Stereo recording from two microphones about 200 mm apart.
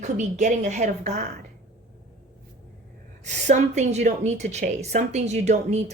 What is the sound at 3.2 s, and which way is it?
A woman's voice, 35° right (ahead or behind).